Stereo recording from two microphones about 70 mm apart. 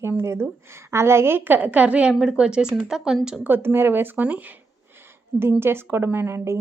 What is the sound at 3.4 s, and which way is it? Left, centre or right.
A woman's voice, right.